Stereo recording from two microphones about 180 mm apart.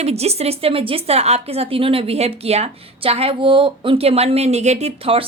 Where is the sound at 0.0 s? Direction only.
35° right (ahead or behind).